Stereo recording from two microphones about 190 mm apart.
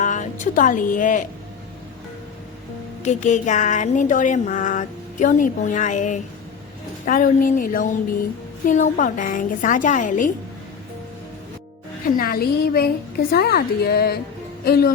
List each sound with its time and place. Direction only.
0.0 s a woman's voice: 40° left (ahead or behind)
3.0 s a woman's voice: 40° left (ahead or behind)
12.0 s a woman's voice: 50° left (ahead or behind)